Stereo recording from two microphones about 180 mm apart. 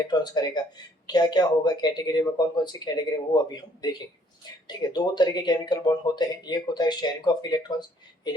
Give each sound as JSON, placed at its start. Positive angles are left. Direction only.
{"t": 0.0, "sound": "speech", "side_deg": 20}